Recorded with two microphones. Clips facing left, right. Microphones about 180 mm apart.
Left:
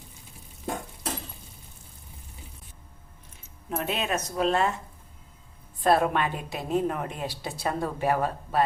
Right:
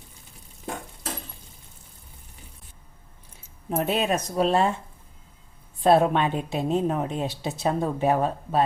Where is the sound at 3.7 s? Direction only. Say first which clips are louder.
Right 5 dB; 35° right (ahead or behind).